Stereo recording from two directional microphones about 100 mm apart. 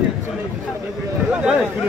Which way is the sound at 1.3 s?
10° right (ahead or behind).